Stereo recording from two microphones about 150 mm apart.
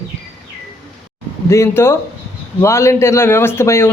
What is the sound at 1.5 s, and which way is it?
A man's voice, 15° left (ahead or behind).